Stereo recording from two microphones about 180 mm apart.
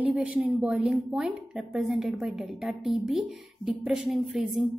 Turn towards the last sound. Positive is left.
turn(degrees=0)  # may be behind; listen again after turning